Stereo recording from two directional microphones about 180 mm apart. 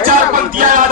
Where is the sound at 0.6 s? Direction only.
45° right (ahead or behind).